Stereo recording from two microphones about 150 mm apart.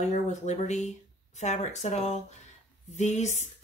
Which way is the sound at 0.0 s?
50° left (ahead or behind).